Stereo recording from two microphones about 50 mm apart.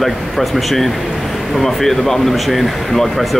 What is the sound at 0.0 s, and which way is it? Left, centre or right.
Speech, centre.